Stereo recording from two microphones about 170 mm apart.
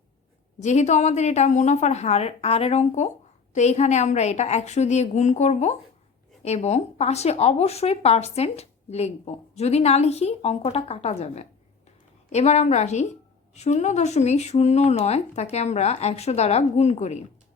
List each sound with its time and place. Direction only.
0.6 s a woman's voice: 45° left (ahead or behind)